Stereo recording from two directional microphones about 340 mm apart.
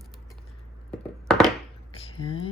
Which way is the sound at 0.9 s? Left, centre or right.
Centre.